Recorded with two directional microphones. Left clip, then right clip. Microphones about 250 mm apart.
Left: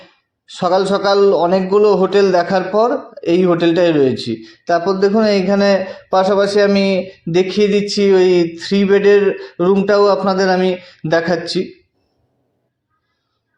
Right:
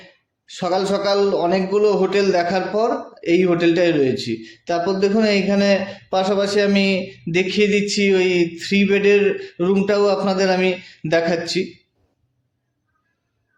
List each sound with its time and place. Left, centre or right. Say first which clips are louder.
0.4 s a man's voice: left 6 dB; left